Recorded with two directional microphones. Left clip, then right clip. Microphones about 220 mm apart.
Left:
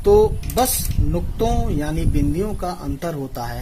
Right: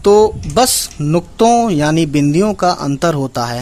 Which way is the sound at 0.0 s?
45° right (ahead or behind).